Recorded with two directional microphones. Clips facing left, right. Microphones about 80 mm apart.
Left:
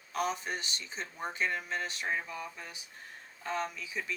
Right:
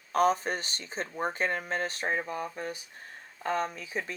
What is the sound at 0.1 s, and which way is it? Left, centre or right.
Speech, right.